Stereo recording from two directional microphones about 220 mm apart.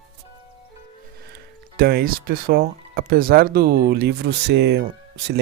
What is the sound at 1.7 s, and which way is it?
Speech, 45° right (ahead or behind).